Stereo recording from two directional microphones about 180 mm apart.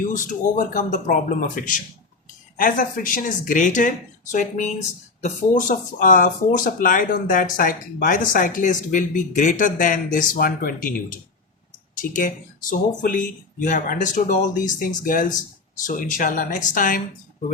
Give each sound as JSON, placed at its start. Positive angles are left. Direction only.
{"t": 0.1, "sound": "speech", "side_deg": 45}